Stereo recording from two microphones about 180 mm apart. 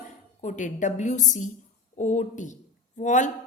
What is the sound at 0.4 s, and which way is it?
A woman's voice, 45° left (ahead or behind).